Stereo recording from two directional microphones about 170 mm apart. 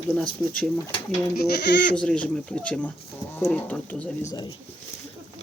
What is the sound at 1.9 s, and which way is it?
Speech, 5° left (ahead or behind).